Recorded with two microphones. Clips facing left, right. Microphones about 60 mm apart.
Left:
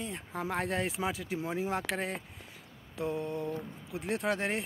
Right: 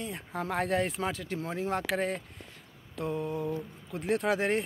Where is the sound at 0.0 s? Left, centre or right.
Centre.